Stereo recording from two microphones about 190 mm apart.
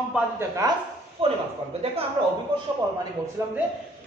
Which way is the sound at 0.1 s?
15° right (ahead or behind).